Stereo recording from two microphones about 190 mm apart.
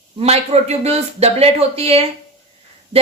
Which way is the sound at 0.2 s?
35° right (ahead or behind).